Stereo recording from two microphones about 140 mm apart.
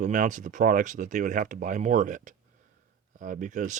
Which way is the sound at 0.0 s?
65° right (ahead or behind).